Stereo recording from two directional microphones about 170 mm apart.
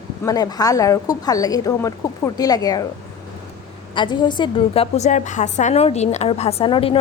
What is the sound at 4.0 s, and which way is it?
A woman's voice, 25° left (ahead or behind).